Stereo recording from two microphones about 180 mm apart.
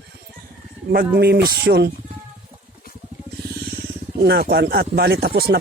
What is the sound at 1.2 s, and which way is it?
Speech, 65° right (ahead or behind).